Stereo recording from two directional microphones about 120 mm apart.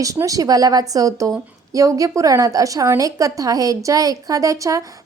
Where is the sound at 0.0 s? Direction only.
30° right (ahead or behind).